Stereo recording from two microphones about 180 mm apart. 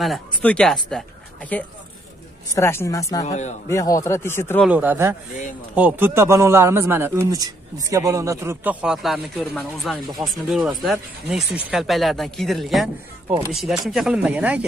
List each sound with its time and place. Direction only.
0.0 s speech: 5° left (ahead or behind); by 3.3 s 20° left (ahead or behind)
3.3 s speech: 40° left (ahead or behind)
3.6 s speech: 15° left (ahead or behind)
4.6 s a man's voice: 10° right (ahead or behind)